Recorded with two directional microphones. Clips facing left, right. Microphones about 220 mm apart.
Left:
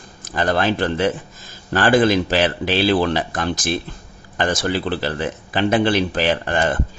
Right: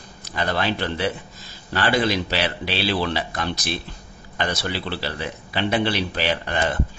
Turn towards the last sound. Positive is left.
turn(degrees=45)  # may be behind; listen again after turning